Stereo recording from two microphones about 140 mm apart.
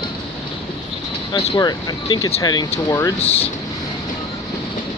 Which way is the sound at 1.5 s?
30° left (ahead or behind).